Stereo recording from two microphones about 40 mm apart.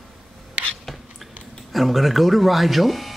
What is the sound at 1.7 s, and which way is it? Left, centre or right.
Speech, centre.